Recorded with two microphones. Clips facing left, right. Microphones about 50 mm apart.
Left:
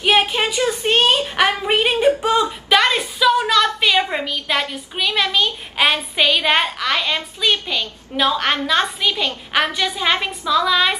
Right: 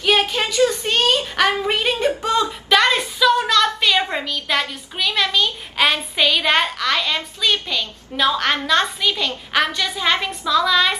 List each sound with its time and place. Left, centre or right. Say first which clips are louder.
0.0 s a woman's voice: left 2 dB; left